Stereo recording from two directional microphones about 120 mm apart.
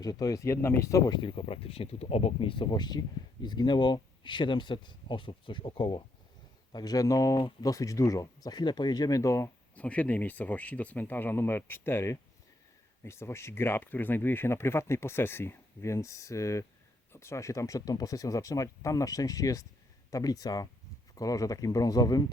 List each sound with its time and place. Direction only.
0.0 s speech: 30° left (ahead or behind)
9.7 s speech: 10° left (ahead or behind); by 22.2 s 30° left (ahead or behind)